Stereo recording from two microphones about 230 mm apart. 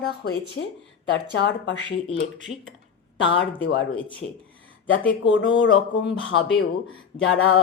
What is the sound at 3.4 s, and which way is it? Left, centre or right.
Speech, left.